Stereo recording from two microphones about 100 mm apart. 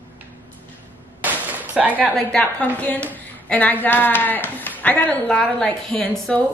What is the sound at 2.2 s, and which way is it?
A woman's voice, 10° left (ahead or behind).